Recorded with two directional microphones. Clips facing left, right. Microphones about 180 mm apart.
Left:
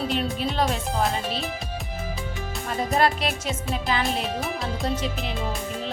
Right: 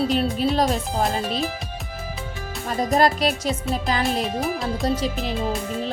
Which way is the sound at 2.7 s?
40° right (ahead or behind).